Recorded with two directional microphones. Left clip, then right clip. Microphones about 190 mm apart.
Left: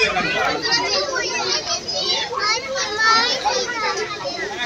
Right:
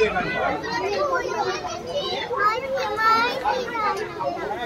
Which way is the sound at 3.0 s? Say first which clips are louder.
Left 3 dB; 60° right (ahead or behind).